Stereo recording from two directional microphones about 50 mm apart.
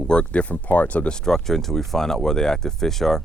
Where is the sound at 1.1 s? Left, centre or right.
Centre.